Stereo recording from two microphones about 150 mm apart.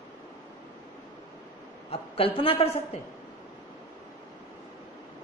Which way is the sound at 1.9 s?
40° left (ahead or behind).